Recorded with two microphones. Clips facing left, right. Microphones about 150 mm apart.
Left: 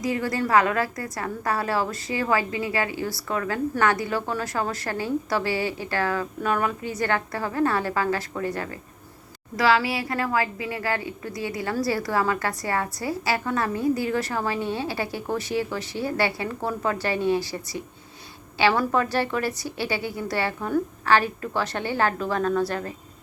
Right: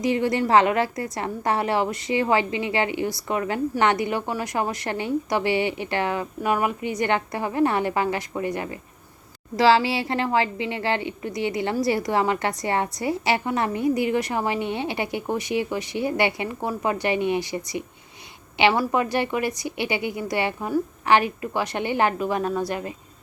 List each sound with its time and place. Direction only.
0.0 s a woman's voice: 25° right (ahead or behind)
9.6 s a woman's voice: 30° right (ahead or behind)